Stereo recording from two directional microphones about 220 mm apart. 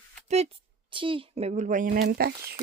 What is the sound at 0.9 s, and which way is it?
Speech, 25° right (ahead or behind).